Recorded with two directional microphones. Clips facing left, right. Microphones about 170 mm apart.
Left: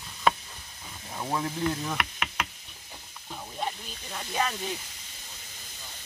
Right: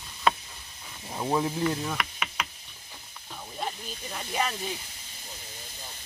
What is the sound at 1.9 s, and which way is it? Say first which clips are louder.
Knock: left 1 dB; 5° left (ahead or behind).